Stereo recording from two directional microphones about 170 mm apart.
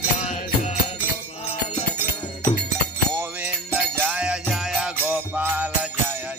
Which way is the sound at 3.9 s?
5° right (ahead or behind).